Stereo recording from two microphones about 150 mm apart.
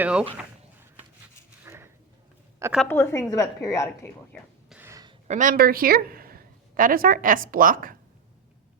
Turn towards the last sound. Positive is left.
turn(degrees=-70)  # may be behind; listen again after turning